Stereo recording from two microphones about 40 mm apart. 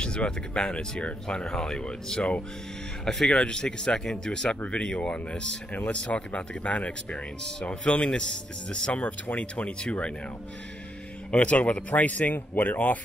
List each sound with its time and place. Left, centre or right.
0.0 s speech: left
3.1 s speech: centre
11.3 s speech: left